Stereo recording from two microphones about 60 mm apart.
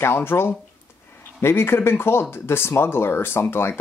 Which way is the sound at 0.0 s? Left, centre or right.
Left.